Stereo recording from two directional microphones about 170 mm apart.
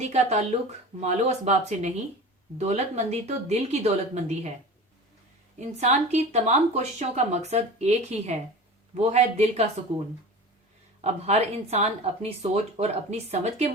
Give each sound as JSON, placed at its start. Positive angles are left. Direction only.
{"t": 0.0, "sound": "speech", "side_deg": -40}
{"t": 5.5, "sound": "speech", "side_deg": -45}
{"t": 11.0, "sound": "speech", "side_deg": -40}